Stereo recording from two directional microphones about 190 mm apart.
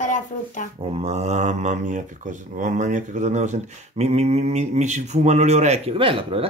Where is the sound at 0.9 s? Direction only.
35° right (ahead or behind).